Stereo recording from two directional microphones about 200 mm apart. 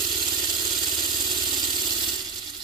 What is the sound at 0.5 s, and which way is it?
Vehicle, 20° right (ahead or behind).